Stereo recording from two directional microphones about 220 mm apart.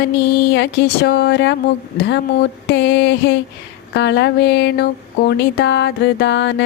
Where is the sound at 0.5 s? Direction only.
50° left (ahead or behind).